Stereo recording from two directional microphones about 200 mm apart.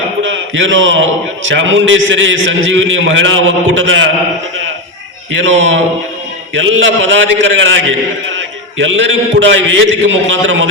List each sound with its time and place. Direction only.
0.2 s a man's voice: 70° right (ahead or behind)
5.3 s a man's voice: 65° right (ahead or behind)